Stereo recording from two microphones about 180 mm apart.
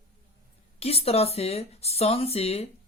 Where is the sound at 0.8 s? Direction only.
35° left (ahead or behind).